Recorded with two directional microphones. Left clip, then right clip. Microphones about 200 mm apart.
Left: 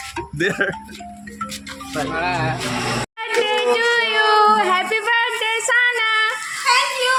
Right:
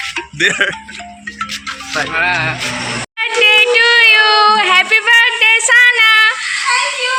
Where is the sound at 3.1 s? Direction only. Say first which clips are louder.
Right 11 dB; 10° left (ahead or behind).